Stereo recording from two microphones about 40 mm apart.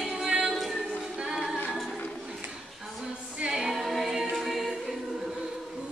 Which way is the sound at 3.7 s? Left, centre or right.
Centre.